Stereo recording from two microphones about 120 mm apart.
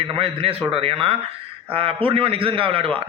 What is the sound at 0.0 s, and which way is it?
Speech, 50° right (ahead or behind).